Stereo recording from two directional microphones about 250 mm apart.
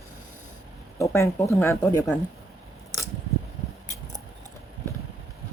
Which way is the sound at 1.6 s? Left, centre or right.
Centre.